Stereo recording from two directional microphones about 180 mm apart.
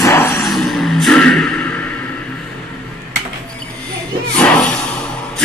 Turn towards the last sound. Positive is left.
turn(degrees=5)  # may be behind; listen again after turning